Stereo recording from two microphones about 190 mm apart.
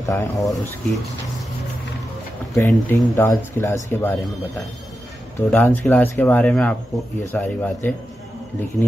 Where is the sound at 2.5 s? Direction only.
15° left (ahead or behind).